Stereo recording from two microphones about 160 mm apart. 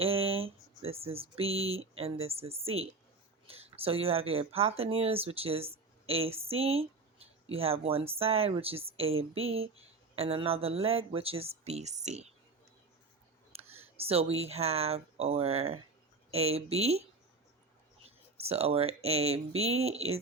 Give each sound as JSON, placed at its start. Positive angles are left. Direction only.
{"t": 0.0, "sound": "speech", "side_deg": -35}
{"t": 13.5, "sound": "speech", "side_deg": -40}
{"t": 18.3, "sound": "speech", "side_deg": -40}